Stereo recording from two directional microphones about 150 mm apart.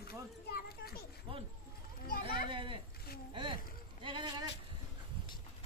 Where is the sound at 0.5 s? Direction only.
90° left.